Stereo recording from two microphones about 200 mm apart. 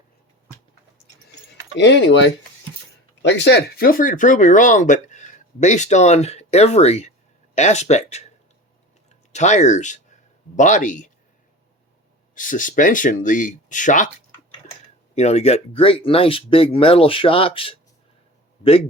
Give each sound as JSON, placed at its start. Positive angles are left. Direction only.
{"t": 1.8, "sound": "speech", "side_deg": 65}
{"t": 9.3, "sound": "speech", "side_deg": 35}
{"t": 12.3, "sound": "speech", "side_deg": 40}
{"t": 15.1, "sound": "speech", "side_deg": 35}